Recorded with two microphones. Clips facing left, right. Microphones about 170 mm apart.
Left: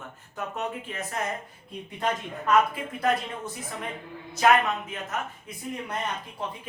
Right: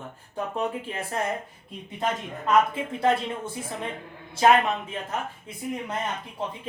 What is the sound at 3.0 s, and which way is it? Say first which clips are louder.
Speech: right 2 dB; 25° right (ahead or behind).